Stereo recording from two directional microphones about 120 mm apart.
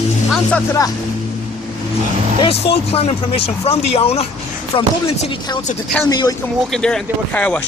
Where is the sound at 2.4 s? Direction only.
55° left (ahead or behind).